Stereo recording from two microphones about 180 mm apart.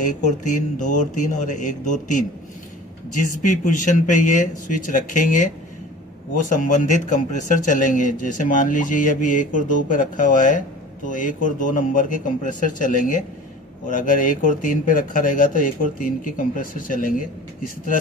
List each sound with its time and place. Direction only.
0.0 s a man's voice: 45° left (ahead or behind)
4.9 s a man's voice: 45° left (ahead or behind)